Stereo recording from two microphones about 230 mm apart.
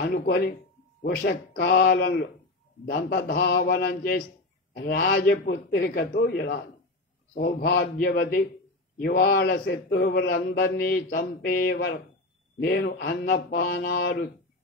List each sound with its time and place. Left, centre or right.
0.0 s mantra: left
4.7 s a man's voice: left
7.3 s mantra: left
8.9 s a man's voice: left
12.5 s mantra: left